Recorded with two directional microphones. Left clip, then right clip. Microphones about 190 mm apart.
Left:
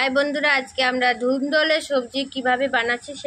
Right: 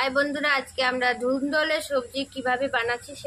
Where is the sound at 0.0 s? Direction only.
20° left (ahead or behind).